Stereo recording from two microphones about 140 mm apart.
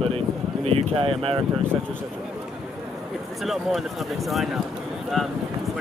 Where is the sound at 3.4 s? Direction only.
Centre (ahead or behind).